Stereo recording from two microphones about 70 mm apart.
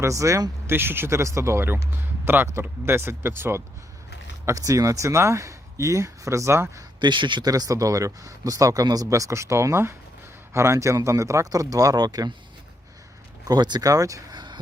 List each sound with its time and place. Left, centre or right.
0.0 s speech: right
0.7 s speech: right
4.4 s speech: right
7.0 s speech: right
13.5 s speech: right